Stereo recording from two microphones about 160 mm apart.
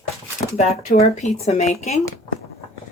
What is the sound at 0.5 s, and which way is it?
Speech, 45° left (ahead or behind).